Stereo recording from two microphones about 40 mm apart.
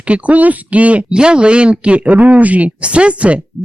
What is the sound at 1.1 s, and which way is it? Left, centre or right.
Speech, right.